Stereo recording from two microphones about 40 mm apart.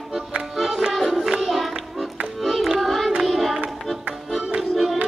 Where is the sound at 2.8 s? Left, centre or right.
Centre.